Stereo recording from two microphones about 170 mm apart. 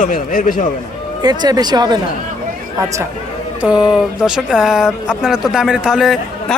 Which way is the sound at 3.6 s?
5° right (ahead or behind).